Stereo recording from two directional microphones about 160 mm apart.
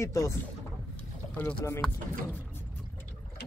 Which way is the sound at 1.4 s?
15° left (ahead or behind).